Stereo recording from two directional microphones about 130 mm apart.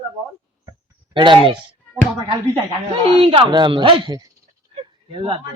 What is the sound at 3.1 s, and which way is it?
A man's voice, 45° right (ahead or behind).